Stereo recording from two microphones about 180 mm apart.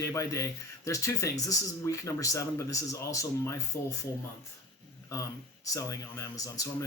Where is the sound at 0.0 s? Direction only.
15° left (ahead or behind).